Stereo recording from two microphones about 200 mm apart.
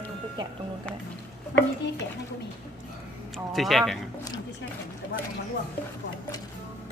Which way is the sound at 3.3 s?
Centre (ahead or behind).